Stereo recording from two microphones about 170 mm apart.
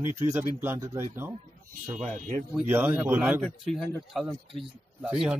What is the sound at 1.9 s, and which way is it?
Speech, 45° right (ahead or behind).